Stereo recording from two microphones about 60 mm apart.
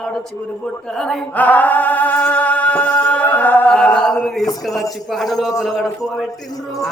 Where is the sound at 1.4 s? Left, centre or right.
Left.